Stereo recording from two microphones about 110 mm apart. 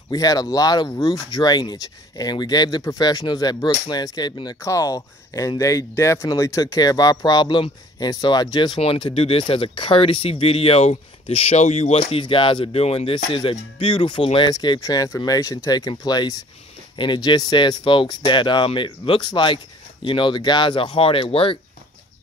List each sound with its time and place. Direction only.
0.1 s speech: 35° left (ahead or behind)
4.6 s speech: 30° left (ahead or behind)
8.7 s speech: 55° left (ahead or behind)
14.5 s speech: 35° left (ahead or behind); by 21.5 s 55° left (ahead or behind)